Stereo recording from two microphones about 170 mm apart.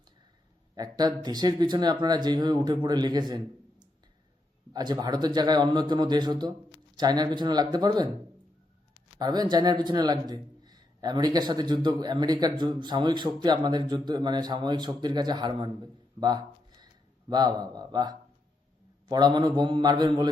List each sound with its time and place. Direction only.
0.8 s speech: 25° right (ahead or behind)
9.1 s speech: 25° right (ahead or behind)